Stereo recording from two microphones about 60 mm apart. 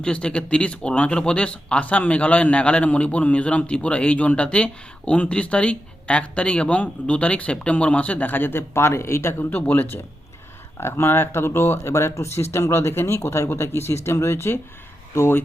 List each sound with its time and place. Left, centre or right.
0.0 s speech: centre; by 9.5 s left
9.5 s speech: left
10.8 s speech: left